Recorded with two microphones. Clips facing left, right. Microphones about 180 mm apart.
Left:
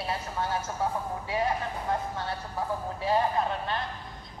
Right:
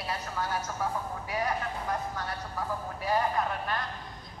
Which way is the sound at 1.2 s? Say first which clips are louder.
Left 3 dB; 25° left (ahead or behind).